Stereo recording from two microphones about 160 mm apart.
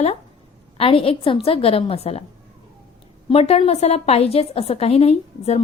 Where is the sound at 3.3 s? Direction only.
40° left (ahead or behind).